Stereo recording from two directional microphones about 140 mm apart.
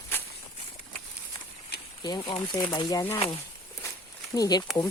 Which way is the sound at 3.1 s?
40° left (ahead or behind).